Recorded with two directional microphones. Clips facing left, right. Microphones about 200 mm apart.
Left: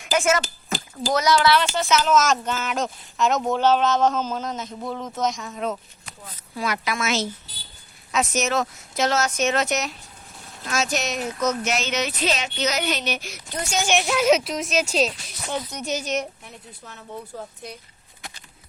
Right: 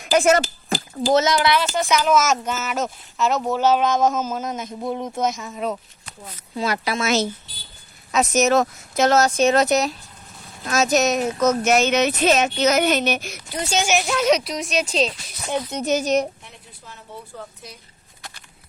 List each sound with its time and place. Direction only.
0.0 s speech: 35° right (ahead or behind)
1.1 s speech: 25° right (ahead or behind)
1.4 s speech: 10° right (ahead or behind)
6.6 s a woman's voice: 30° right (ahead or behind); by 9.2 s 45° right (ahead or behind)
9.2 s a woman's voice: 35° right (ahead or behind); by 13.3 s 50° right (ahead or behind)
13.8 s a woman's voice: centre (ahead or behind)
15.4 s speech: 20° right (ahead or behind)
16.0 s a woman's voice: 40° right (ahead or behind)